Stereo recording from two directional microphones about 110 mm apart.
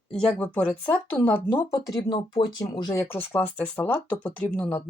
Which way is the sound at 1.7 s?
35° left (ahead or behind).